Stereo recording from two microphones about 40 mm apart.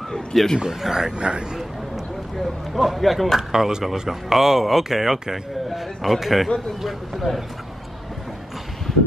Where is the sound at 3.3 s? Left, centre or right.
Centre.